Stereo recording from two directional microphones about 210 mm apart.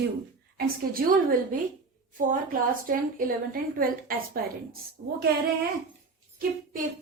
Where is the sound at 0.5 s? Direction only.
40° right (ahead or behind).